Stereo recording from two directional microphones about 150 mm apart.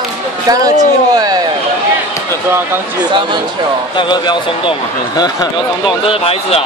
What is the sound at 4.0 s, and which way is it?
Speech, 30° left (ahead or behind).